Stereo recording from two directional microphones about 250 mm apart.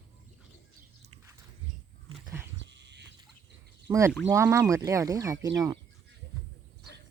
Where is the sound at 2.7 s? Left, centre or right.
Right.